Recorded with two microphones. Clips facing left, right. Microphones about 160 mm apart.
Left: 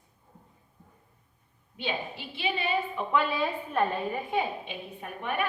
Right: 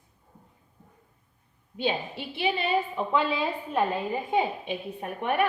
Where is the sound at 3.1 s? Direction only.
25° right (ahead or behind).